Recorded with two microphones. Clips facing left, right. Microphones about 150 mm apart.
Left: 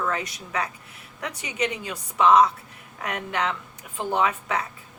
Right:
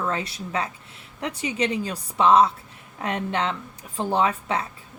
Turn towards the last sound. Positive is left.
turn(degrees=-30)  # may be behind; listen again after turning